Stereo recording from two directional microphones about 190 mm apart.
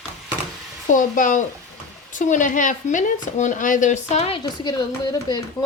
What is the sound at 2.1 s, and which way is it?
A woman's voice, 40° left (ahead or behind).